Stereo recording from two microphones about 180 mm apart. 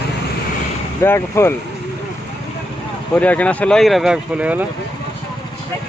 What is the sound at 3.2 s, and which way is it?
Speech, 10° left (ahead or behind).